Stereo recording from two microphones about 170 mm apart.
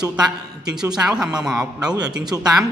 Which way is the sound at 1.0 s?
5° right (ahead or behind).